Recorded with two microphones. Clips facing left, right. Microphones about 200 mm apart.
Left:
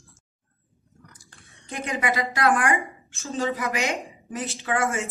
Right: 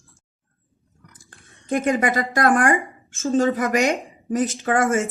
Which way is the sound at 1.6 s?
50° right (ahead or behind).